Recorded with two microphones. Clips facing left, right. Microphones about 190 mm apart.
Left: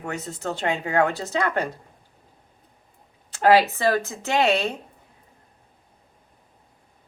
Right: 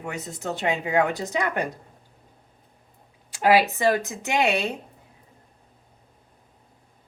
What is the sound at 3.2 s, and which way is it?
A woman's voice, 10° right (ahead or behind).